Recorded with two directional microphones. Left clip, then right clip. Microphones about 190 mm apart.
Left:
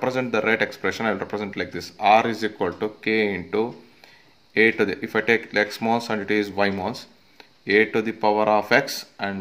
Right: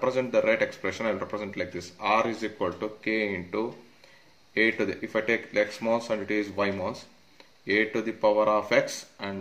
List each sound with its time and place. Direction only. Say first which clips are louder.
0.0 s speech: left 2 dB; 45° left (ahead or behind)